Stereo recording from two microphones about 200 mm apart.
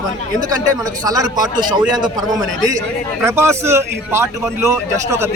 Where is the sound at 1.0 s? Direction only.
20° right (ahead or behind).